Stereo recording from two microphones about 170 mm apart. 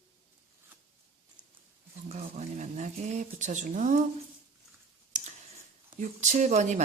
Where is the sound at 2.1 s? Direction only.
40° right (ahead or behind).